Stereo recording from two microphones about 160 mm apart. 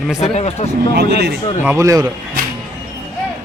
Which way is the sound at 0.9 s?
90° right.